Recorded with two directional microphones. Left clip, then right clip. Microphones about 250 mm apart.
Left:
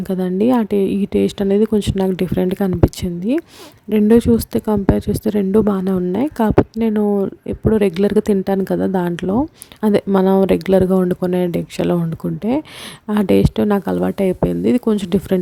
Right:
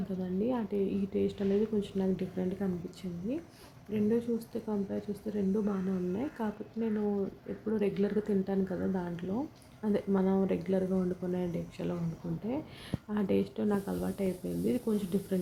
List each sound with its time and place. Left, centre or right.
0.2 s speech: left
13.1 s speech: left